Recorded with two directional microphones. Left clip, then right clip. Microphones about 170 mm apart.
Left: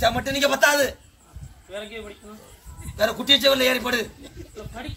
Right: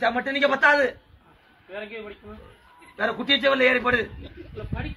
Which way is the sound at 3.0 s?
20° left (ahead or behind).